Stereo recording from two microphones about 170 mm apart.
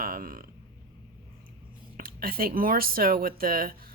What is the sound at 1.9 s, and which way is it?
Speech, 60° right (ahead or behind).